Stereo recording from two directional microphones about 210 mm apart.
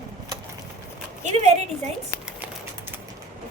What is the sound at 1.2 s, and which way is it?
Speech, 30° right (ahead or behind).